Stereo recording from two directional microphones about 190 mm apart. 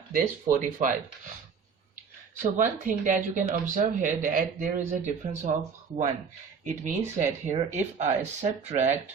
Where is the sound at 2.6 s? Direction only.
40° right (ahead or behind).